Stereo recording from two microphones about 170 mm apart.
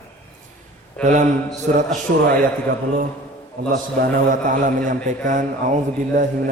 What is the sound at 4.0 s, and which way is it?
A man's voice, 50° right (ahead or behind).